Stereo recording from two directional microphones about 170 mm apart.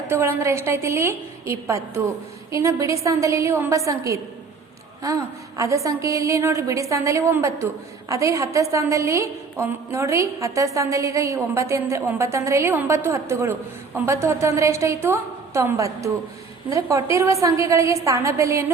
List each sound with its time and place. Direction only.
0.1 s a woman's voice: 15° right (ahead or behind)